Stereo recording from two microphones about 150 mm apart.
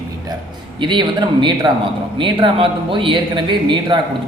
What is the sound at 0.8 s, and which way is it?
A man's voice, 30° right (ahead or behind).